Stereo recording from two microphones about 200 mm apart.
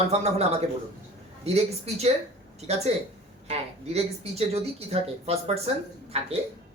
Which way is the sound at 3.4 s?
30° right (ahead or behind).